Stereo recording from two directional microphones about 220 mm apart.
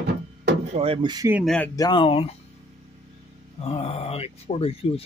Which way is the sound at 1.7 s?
20° left (ahead or behind).